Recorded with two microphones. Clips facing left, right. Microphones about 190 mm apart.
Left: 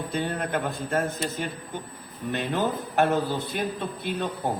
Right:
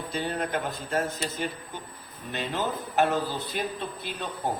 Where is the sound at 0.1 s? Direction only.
55° left (ahead or behind).